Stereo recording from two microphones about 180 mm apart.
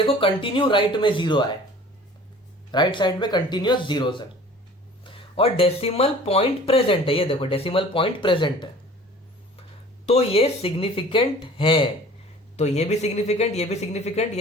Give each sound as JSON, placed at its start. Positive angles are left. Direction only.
{"t": 0.0, "sound": "speech", "side_deg": 30}
{"t": 2.7, "sound": "speech", "side_deg": 25}
{"t": 10.1, "sound": "speech", "side_deg": 35}